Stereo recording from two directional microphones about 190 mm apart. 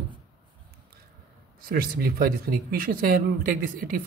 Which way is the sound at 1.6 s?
50° right (ahead or behind).